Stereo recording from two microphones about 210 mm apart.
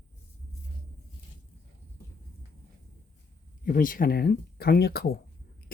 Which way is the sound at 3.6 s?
40° left (ahead or behind).